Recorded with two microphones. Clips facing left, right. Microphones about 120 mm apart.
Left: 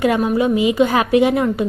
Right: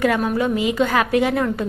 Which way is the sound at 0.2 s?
10° left (ahead or behind).